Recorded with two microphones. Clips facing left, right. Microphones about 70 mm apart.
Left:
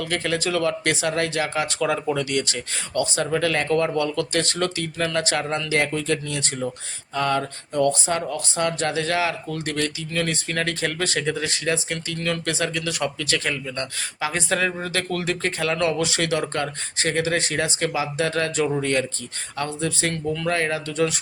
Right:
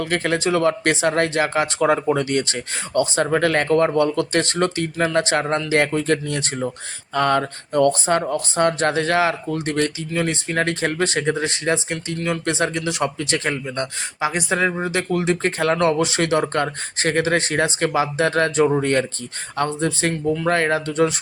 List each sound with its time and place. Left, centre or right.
0.0 s speech: right
10.1 s speech: right
11.9 s speech: centre
14.2 s speech: centre
15.4 s speech: right